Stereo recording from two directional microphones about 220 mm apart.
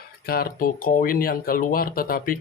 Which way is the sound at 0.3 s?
40° left (ahead or behind).